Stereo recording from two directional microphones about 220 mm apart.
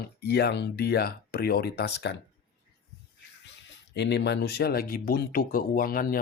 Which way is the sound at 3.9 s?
50° left (ahead or behind).